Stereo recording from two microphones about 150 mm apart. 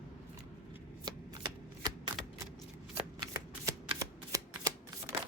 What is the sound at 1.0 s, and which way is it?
Shuffling cards, 30° right (ahead or behind).